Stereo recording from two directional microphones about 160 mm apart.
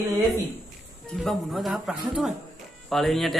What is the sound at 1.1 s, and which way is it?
A man's voice, centre (ahead or behind).